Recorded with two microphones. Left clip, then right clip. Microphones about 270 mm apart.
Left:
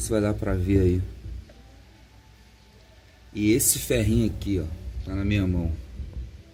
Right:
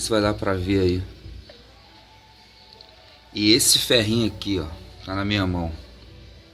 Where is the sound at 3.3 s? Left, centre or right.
Centre.